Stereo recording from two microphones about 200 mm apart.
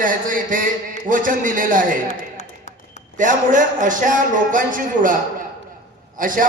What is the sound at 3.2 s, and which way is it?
A man's voice, 40° right (ahead or behind).